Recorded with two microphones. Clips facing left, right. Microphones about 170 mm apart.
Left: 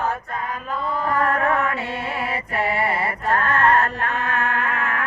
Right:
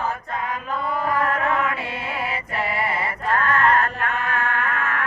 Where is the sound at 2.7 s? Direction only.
30° left (ahead or behind).